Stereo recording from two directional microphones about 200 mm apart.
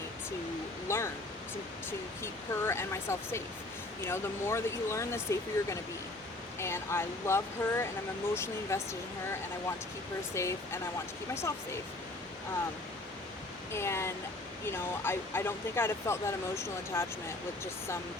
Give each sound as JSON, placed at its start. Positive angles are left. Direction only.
{"t": 0.9, "sound": "speech", "side_deg": 15}
{"t": 10.3, "sound": "speech", "side_deg": 15}
{"t": 13.7, "sound": "speech", "side_deg": 15}